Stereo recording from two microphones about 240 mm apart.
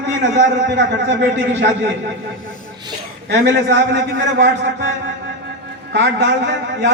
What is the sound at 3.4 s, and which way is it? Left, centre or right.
A man's voice, right.